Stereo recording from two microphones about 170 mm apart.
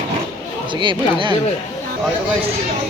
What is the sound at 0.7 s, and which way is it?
Speech, 30° right (ahead or behind).